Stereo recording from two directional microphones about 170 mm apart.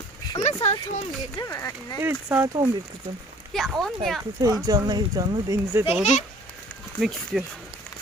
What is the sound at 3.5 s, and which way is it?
Speech, centre (ahead or behind).